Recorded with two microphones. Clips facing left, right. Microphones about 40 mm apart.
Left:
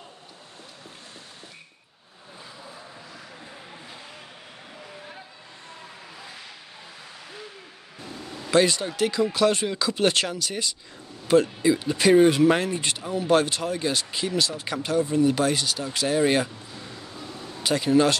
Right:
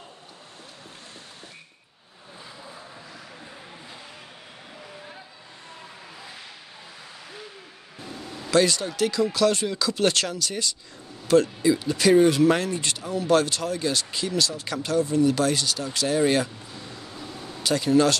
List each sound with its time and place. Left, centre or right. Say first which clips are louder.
8.5 s speech: even; centre
17.6 s speech: even; centre